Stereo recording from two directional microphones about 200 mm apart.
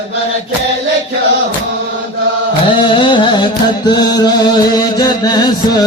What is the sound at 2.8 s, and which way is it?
Music, 25° left (ahead or behind).